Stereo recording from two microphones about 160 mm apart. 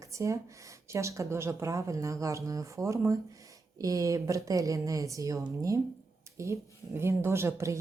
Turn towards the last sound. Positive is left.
turn(degrees=-15)  # may be behind; listen again after turning